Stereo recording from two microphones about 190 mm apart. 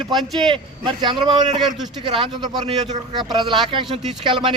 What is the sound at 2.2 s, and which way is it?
A man's voice, 25° right (ahead or behind).